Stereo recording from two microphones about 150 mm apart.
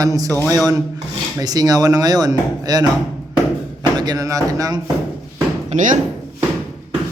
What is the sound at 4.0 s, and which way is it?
Speech, 25° right (ahead or behind).